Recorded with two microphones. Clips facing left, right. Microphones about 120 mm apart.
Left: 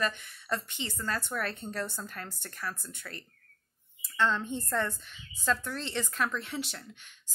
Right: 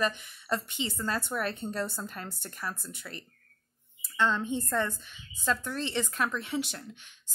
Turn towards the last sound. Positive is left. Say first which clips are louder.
# right 3 dB
turn(degrees=-10)  # may be behind; listen again after turning